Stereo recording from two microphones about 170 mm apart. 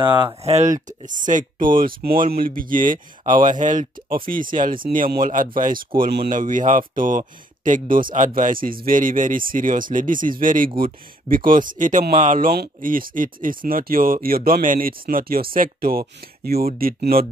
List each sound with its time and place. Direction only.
0.0 s speech: 25° right (ahead or behind)
0.4 s speech: 40° right (ahead or behind); by 17.3 s 60° right (ahead or behind)